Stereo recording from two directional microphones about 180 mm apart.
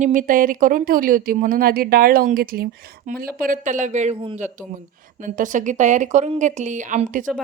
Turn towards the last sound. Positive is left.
turn(degrees=-45)  # may be behind; listen again after turning